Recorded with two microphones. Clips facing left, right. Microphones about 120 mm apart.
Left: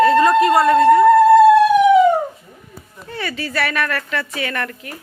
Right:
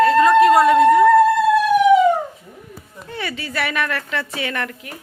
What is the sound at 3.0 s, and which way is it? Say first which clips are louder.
A woman's voice: left 2 dB; 15° right (ahead or behind).